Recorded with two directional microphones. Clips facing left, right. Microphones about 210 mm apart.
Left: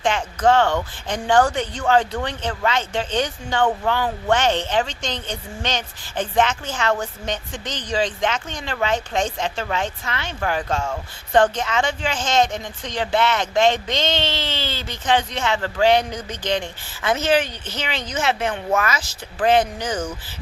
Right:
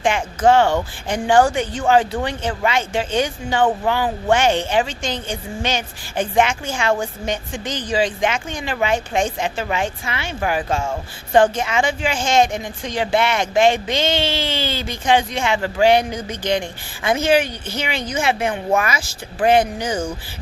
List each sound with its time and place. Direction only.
0.0 s a woman's voice: 10° right (ahead or behind)